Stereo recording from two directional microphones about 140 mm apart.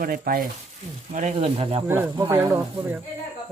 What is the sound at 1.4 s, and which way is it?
Speech, 40° right (ahead or behind).